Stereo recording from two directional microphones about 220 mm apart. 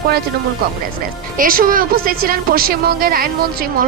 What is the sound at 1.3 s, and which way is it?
A woman's voice, 40° right (ahead or behind).